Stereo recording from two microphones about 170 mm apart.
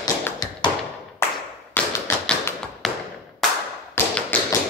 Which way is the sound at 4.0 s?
15° left (ahead or behind).